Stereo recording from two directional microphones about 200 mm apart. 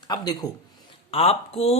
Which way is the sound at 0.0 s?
20° left (ahead or behind).